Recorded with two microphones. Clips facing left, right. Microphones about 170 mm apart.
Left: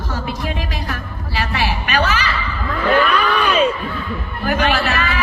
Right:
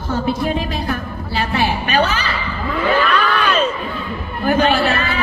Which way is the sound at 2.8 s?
5° right (ahead or behind).